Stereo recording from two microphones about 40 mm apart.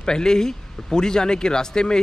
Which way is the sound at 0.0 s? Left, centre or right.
Centre.